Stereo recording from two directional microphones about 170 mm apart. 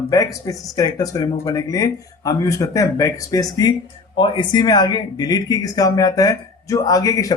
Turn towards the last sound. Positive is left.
turn(degrees=20)  # may be behind; listen again after turning